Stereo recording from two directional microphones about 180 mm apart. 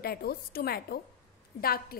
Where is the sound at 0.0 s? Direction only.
60° left (ahead or behind).